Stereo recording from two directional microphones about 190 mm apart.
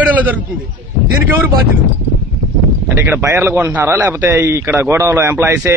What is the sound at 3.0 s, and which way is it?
A man's voice, 15° right (ahead or behind).